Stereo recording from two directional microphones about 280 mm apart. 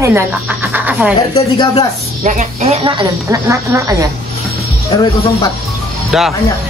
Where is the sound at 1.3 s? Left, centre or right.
Centre.